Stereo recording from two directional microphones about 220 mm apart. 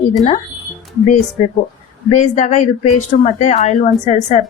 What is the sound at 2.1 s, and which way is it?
A woman's voice, 35° left (ahead or behind).